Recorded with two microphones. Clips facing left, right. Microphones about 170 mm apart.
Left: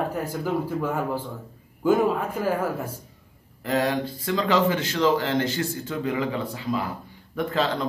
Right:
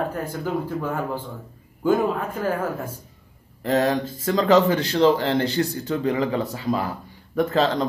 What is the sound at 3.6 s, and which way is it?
A man's voice, 40° right (ahead or behind).